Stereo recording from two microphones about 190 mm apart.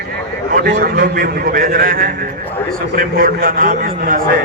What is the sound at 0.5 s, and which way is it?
A man's voice, 50° right (ahead or behind).